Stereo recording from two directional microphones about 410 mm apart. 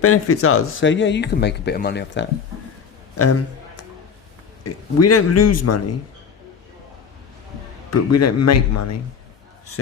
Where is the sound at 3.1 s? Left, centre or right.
Left.